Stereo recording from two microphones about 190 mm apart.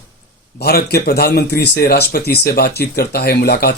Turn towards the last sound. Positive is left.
turn(degrees=55)  # may be behind; listen again after turning